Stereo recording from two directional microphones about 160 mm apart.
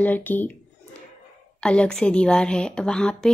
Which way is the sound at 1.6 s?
5° left (ahead or behind).